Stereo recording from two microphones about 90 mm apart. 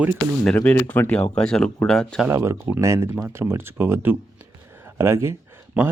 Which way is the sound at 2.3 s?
30° right (ahead or behind).